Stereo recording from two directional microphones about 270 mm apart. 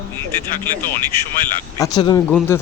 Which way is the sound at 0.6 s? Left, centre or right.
Centre.